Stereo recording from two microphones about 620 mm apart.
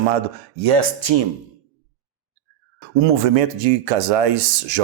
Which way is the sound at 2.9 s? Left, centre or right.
Right.